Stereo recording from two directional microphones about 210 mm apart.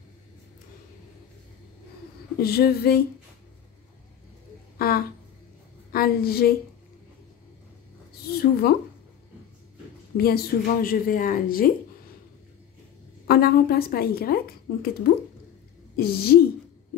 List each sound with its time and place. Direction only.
2.4 s speech: 50° left (ahead or behind)
4.7 s a woman's voice: 45° left (ahead or behind)
8.1 s a sound: 45° left (ahead or behind)
10.1 s speech: 45° left (ahead or behind)
13.3 s speech: 45° left (ahead or behind)
16.0 s speech: 45° left (ahead or behind)